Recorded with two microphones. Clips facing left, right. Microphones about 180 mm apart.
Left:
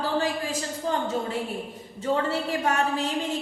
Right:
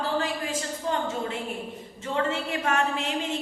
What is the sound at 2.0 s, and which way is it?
Speech, 35° left (ahead or behind).